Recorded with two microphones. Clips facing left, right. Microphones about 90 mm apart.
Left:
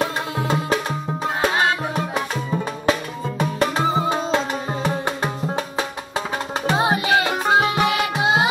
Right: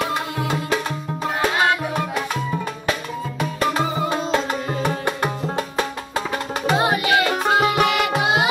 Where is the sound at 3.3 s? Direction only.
25° left (ahead or behind).